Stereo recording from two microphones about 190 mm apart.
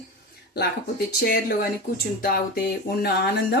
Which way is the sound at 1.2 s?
55° left (ahead or behind).